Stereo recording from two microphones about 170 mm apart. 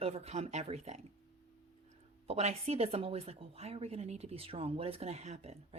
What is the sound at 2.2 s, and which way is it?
Speech, 35° right (ahead or behind).